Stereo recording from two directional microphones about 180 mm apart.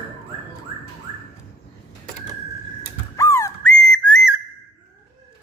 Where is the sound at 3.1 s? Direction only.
20° left (ahead or behind).